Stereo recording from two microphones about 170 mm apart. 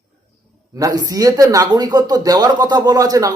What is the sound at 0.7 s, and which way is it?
Speech, 20° right (ahead or behind).